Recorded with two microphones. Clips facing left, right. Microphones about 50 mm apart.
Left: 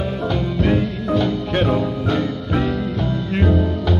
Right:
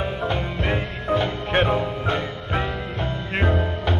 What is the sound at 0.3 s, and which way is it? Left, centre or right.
Music, right.